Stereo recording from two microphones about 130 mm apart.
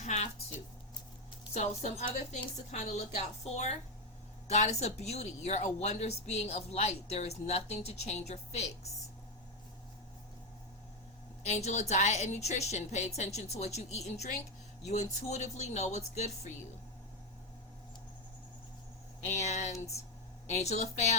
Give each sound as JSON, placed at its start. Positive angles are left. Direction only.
{"t": 0.0, "sound": "a sound", "side_deg": 75}
{"t": 1.5, "sound": "speech", "side_deg": 65}
{"t": 11.4, "sound": "speech", "side_deg": 60}
{"t": 19.3, "sound": "speech", "side_deg": 60}